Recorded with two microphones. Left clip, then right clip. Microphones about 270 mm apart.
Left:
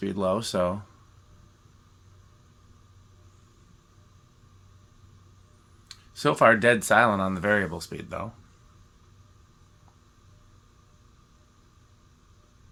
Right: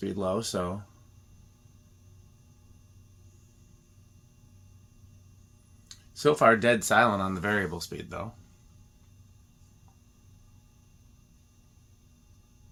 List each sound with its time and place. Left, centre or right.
0.0 s speech: left
5.9 s speech: left